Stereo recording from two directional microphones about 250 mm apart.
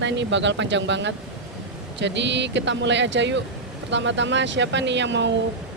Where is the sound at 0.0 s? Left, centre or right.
Right.